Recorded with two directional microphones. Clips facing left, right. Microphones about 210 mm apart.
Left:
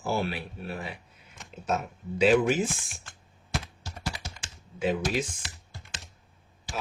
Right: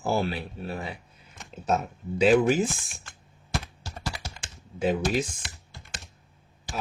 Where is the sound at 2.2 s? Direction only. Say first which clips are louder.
Right 2 dB; 40° right (ahead or behind).